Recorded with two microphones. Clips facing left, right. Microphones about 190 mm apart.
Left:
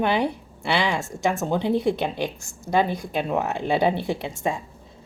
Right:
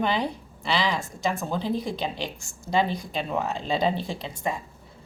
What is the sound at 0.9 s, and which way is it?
Speech, 75° left (ahead or behind).